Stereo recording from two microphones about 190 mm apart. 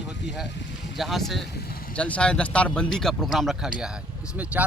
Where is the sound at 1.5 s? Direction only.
55° left (ahead or behind).